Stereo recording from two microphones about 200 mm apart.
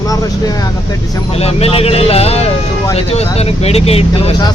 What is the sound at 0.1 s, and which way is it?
Vehicle, 20° left (ahead or behind).